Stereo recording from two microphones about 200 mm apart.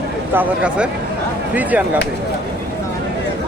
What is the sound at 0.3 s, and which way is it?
Speech, 5° right (ahead or behind).